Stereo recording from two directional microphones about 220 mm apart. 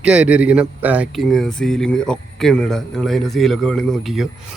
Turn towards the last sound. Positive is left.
turn(degrees=0)  # may be behind; listen again after turning